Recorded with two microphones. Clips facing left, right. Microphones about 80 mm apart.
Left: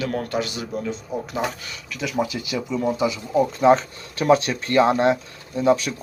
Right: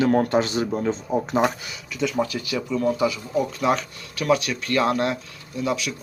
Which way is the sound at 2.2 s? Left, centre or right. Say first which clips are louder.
Even; centre.